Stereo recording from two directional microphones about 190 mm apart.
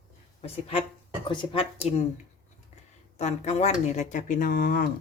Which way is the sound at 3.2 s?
35° left (ahead or behind).